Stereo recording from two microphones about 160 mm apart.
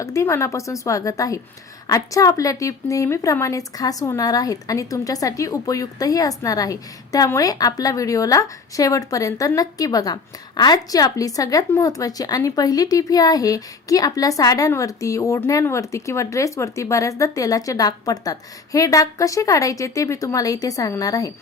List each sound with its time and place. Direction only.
0.0 s a woman's voice: 20° left (ahead or behind)